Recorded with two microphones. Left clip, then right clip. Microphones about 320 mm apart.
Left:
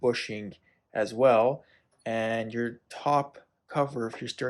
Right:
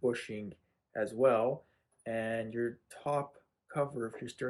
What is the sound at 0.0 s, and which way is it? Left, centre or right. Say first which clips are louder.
Speech: left 7 dB; centre.